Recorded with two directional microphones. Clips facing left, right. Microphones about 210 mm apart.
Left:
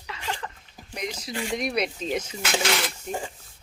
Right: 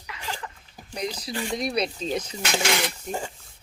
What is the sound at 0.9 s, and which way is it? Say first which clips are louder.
Speech: right 2 dB; 35° right (ahead or behind).